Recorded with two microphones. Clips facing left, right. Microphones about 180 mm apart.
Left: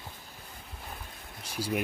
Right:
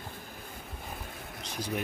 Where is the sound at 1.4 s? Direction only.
10° left (ahead or behind).